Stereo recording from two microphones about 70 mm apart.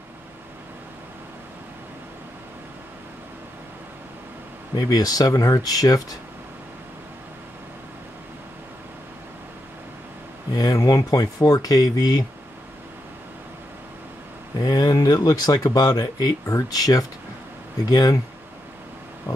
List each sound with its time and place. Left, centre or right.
4.7 s speech: left
10.5 s speech: left
14.6 s speech: left
19.3 s a sound: left